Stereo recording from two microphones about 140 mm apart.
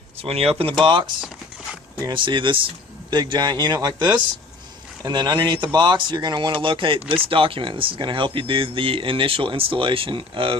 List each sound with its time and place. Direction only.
0.2 s speech: 45° right (ahead or behind)